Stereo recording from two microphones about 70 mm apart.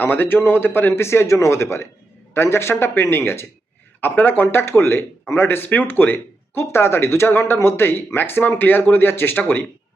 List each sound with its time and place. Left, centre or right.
0.0 s speech: left